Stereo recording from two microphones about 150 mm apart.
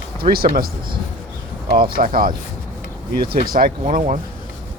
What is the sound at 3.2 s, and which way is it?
Speech, 85° right.